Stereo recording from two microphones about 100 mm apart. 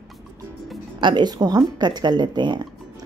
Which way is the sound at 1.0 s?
50° right (ahead or behind).